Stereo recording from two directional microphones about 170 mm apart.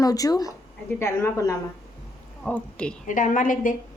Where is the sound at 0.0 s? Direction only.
20° left (ahead or behind).